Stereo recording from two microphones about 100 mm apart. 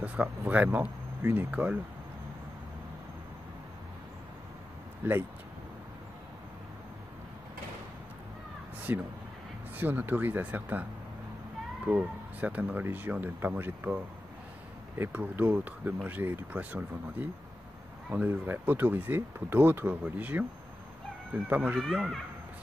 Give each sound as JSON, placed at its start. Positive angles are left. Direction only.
{"t": 0.0, "sound": "speech", "side_deg": -15}
{"t": 5.0, "sound": "speech", "side_deg": -20}
{"t": 8.9, "sound": "speech", "side_deg": -20}
{"t": 21.5, "sound": "speech", "side_deg": -15}
{"t": 21.7, "sound": "speech", "side_deg": 0}